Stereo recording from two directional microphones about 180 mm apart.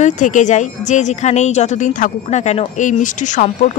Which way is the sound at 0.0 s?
45° left (ahead or behind).